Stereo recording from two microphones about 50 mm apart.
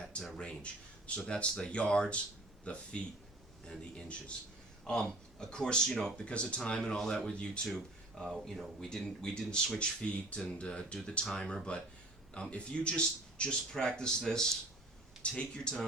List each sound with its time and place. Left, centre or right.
0.0 s a sound: centre
0.3 s speech: left
5.9 s speech: centre
6.2 s speech: left
8.1 s speech: centre